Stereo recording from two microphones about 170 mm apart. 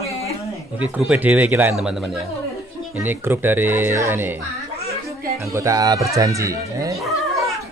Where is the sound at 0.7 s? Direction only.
10° right (ahead or behind).